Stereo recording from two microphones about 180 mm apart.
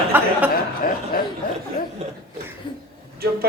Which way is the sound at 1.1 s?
55° left (ahead or behind).